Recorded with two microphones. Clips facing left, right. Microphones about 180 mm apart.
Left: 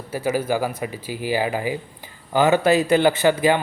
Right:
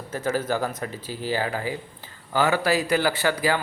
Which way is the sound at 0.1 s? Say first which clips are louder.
Left 3 dB; 10° left (ahead or behind).